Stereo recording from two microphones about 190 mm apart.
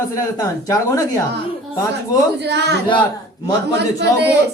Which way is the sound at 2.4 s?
65° right (ahead or behind).